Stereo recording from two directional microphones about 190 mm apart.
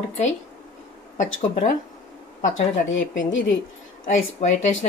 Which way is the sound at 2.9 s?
80° left.